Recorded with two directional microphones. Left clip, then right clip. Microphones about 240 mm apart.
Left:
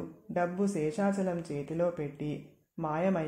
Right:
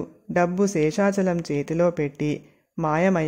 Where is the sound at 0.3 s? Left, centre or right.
Right.